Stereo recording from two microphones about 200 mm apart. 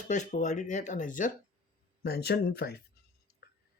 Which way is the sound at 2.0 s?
50° left (ahead or behind).